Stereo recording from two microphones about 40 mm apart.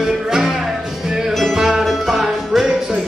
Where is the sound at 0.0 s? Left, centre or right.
Centre.